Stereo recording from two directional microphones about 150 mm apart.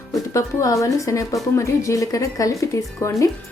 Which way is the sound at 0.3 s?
20° left (ahead or behind).